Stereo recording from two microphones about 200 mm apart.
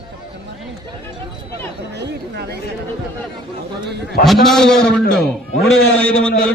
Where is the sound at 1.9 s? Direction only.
55° right (ahead or behind).